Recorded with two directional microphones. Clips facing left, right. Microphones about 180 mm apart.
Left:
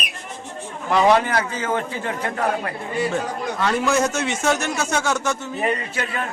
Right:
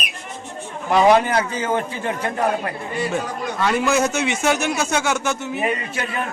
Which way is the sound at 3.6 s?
5° right (ahead or behind).